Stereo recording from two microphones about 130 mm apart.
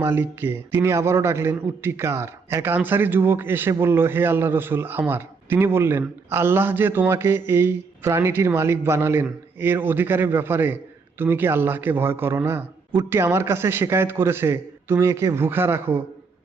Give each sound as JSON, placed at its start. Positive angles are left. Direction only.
{"t": 0.0, "sound": "a man's voice", "side_deg": -15}